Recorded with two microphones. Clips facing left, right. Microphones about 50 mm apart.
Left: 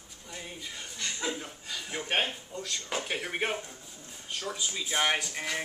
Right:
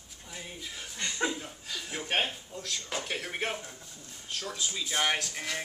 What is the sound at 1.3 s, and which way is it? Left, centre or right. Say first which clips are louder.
Speech: even; centre.